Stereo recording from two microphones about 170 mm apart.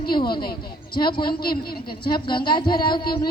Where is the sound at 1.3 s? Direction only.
65° left (ahead or behind).